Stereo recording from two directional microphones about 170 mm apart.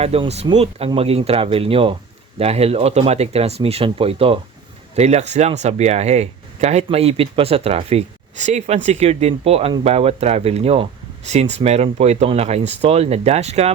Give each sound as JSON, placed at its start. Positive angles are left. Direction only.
{"t": 0.0, "sound": "speech", "side_deg": -35}